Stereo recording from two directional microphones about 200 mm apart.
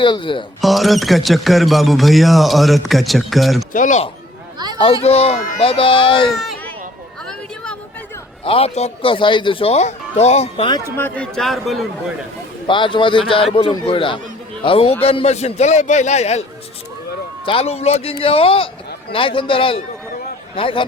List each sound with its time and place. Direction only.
0.0 s speech: 25° left (ahead or behind)
0.6 s speech: centre (ahead or behind)
3.7 s a man's voice: 40° left (ahead or behind)
4.5 s a sound: 20° right (ahead or behind)
4.8 s speech: 30° left (ahead or behind)
6.3 s a sound: centre (ahead or behind)
8.4 s speech: 30° left (ahead or behind)
10.9 s speech: 5° left (ahead or behind)
12.6 s a man's voice: 25° left (ahead or behind)
17.4 s speech: 25° left (ahead or behind)